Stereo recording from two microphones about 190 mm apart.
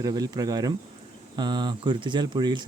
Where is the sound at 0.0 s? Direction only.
20° right (ahead or behind).